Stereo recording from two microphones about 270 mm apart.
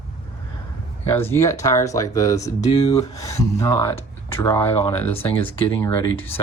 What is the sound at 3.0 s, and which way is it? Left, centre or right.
Speech, centre.